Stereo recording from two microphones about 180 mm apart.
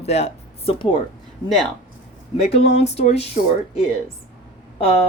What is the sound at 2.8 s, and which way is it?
Speech, 40° left (ahead or behind).